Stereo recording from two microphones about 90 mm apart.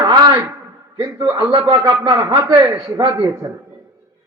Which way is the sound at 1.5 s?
55° right (ahead or behind).